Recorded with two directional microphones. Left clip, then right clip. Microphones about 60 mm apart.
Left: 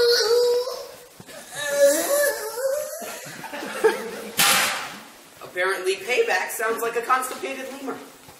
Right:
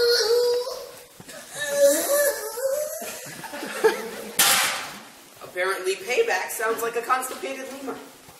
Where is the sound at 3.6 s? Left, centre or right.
Centre.